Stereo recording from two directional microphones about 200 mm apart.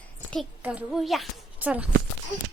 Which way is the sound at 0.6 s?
5° right (ahead or behind).